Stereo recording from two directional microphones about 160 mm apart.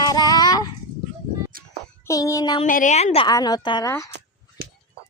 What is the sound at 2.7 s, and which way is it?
Speech, 55° left (ahead or behind).